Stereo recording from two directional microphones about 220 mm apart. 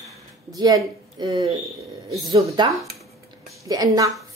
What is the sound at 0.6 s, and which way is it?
A woman's voice, 20° right (ahead or behind).